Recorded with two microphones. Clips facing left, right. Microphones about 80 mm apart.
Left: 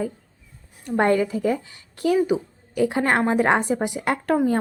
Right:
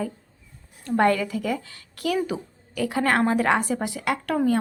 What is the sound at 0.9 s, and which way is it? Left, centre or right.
A woman's voice, left.